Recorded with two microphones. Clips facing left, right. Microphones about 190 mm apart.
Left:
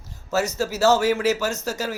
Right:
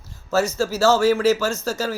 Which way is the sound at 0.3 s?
20° left (ahead or behind).